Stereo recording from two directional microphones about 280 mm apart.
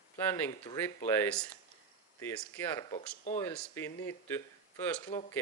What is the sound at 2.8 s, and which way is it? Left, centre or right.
Speech, left.